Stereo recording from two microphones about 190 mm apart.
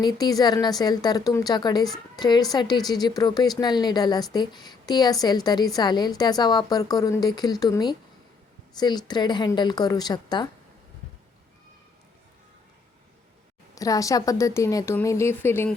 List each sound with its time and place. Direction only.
0.0 s a woman's voice: 20° left (ahead or behind)
13.7 s a woman's voice: 20° left (ahead or behind)